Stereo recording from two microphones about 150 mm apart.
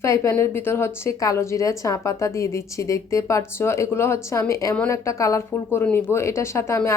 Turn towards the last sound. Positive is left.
turn(degrees=20)  # may be behind; listen again after turning